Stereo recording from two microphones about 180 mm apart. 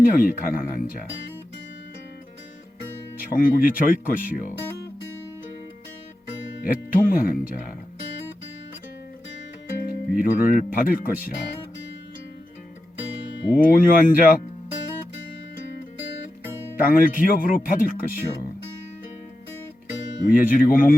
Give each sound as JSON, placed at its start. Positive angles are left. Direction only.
{"t": 0.0, "sound": "speech", "side_deg": 50}
{"t": 3.3, "sound": "speech", "side_deg": 50}
{"t": 6.6, "sound": "speech", "side_deg": 50}
{"t": 9.8, "sound": "speech", "side_deg": 55}
{"t": 13.6, "sound": "speech", "side_deg": 50}
{"t": 16.7, "sound": "speech", "side_deg": 50}
{"t": 20.3, "sound": "speech", "side_deg": 50}